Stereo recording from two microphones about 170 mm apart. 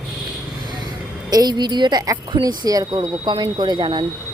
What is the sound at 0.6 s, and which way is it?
A woman's voice, 25° right (ahead or behind).